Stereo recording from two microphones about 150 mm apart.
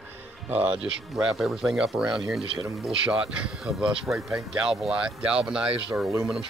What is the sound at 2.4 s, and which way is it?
Speech, 35° right (ahead or behind).